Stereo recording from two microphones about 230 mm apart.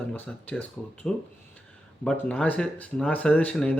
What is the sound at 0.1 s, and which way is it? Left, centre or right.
Speech, centre.